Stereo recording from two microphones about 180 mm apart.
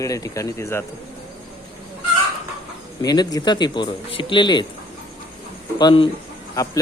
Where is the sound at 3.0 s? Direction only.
20° left (ahead or behind).